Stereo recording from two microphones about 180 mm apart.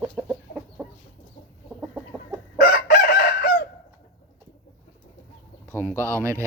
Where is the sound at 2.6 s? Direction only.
50° left (ahead or behind).